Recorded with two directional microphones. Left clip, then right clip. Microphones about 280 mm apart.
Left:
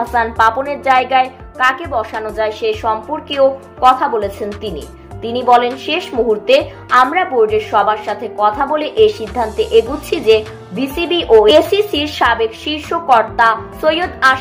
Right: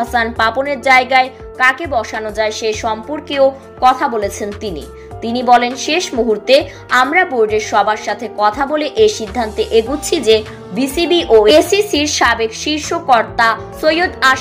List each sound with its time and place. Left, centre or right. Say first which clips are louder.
0.1 s a woman's voice: left 4 dB; right